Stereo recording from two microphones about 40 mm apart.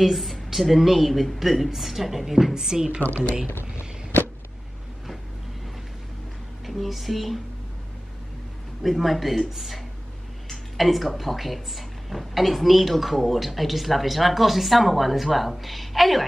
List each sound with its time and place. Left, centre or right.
0.0 s speech: centre
2.5 s a woman's voice: centre
3.0 s speech: left
3.5 s a sound: left
6.6 s speech: centre
8.8 s speech: centre